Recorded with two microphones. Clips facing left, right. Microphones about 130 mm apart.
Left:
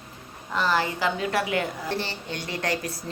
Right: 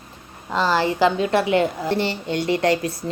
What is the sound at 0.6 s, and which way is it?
A woman's voice, 30° right (ahead or behind).